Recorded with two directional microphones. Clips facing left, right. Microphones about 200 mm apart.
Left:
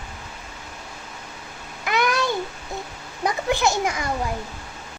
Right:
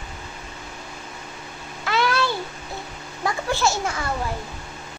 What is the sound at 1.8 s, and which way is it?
Babbling, 15° left (ahead or behind).